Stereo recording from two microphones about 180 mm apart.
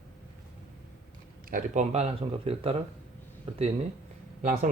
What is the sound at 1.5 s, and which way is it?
Speech, 50° right (ahead or behind).